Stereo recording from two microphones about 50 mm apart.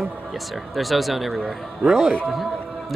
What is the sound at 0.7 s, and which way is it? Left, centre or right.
A man's voice, centre.